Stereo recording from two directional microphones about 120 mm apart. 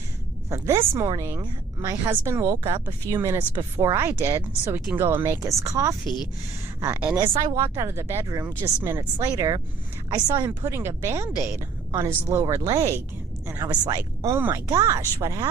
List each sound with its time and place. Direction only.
0.5 s speech: 25° right (ahead or behind)
3.5 s speech: 35° right (ahead or behind)
3.9 s speech: 20° right (ahead or behind)
10.6 s speech: 20° right (ahead or behind)
11.9 s speech: 40° right (ahead or behind)
12.3 s speech: 25° right (ahead or behind)